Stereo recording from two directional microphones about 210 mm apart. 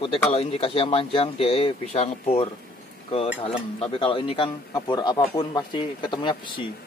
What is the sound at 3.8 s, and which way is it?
Speech, 25° left (ahead or behind).